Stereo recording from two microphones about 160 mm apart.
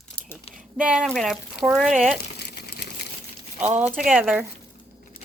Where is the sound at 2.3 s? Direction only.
90° left.